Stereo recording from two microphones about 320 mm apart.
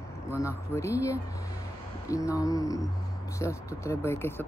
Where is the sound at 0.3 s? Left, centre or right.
Centre.